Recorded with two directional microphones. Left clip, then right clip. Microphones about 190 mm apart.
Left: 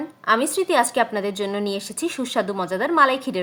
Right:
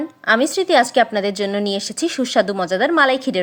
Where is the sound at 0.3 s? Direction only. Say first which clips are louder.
Right 4 dB; 25° right (ahead or behind).